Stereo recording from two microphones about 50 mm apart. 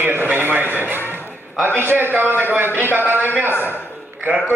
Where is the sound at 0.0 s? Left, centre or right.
Right.